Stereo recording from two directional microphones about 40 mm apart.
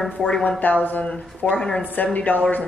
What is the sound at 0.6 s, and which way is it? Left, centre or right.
Speech, left.